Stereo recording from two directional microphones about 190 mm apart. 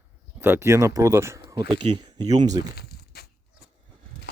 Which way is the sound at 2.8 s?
55° left (ahead or behind).